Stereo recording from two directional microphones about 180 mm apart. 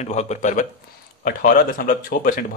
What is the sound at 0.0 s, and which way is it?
Speech, 40° left (ahead or behind).